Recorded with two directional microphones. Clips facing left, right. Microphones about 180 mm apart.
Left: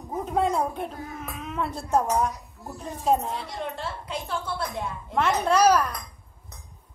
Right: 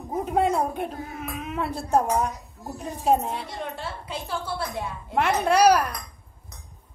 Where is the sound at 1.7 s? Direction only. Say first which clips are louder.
Right 2 dB; 30° right (ahead or behind).